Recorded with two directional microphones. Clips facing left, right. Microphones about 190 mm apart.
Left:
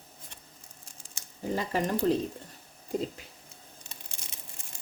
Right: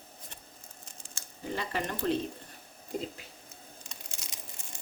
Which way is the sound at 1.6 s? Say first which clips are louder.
Left 5 dB; 40° left (ahead or behind).